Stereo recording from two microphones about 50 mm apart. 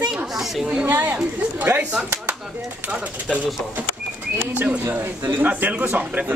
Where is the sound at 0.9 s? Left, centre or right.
Right.